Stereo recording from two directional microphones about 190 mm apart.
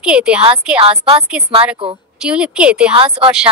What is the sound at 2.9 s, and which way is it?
Speech, 30° right (ahead or behind).